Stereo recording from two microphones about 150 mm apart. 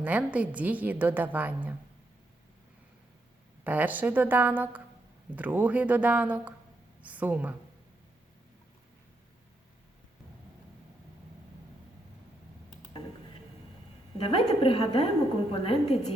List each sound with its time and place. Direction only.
0.0 s a woman's voice: 10° right (ahead or behind)
3.6 s a woman's voice: 10° right (ahead or behind)
14.3 s a woman's voice: 35° left (ahead or behind)